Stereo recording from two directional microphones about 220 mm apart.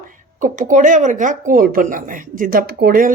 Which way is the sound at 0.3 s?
35° right (ahead or behind).